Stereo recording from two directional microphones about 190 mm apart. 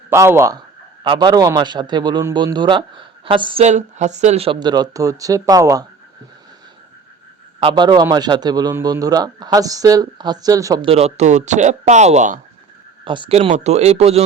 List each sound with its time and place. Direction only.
0.1 s a man's voice: 15° right (ahead or behind)
7.6 s a man's voice: 25° right (ahead or behind)
10.8 s speech: 35° right (ahead or behind)
13.1 s a man's voice: 25° right (ahead or behind)